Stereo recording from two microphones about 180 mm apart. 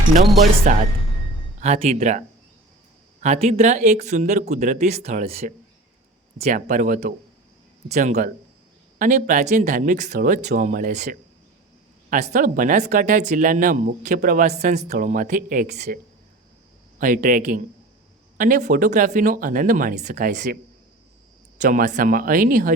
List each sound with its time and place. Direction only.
0.7 s speech: 40° right (ahead or behind)
17.0 s speech: 50° right (ahead or behind)
21.6 s speech: 45° right (ahead or behind)